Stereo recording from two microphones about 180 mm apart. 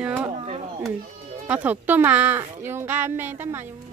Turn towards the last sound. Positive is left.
turn(degrees=-10)  # may be behind; listen again after turning